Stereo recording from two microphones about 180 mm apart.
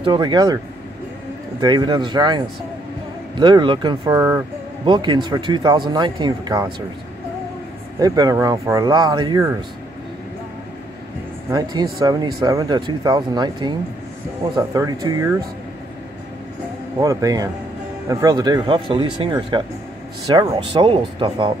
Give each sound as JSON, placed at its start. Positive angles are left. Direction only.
{"t": 0.0, "sound": "speech", "side_deg": -25}
{"t": 1.6, "sound": "speech", "side_deg": -20}
{"t": 8.0, "sound": "speech", "side_deg": -20}
{"t": 11.5, "sound": "speech", "side_deg": -20}
{"t": 17.0, "sound": "speech", "side_deg": -20}
{"t": 20.5, "sound": "speech", "side_deg": -30}